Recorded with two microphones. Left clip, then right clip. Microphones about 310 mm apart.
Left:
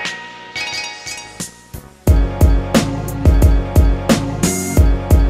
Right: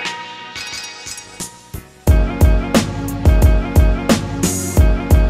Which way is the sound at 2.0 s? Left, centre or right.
Centre.